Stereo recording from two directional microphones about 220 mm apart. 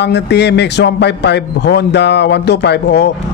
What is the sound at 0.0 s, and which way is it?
Speech, 50° left (ahead or behind).